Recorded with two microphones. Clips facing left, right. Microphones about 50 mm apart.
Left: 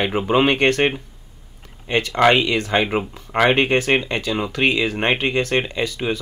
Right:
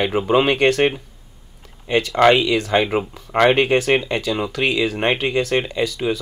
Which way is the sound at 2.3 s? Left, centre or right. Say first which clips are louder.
Right 1 dB; left.